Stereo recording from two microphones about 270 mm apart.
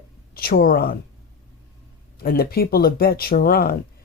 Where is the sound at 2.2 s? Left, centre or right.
Left.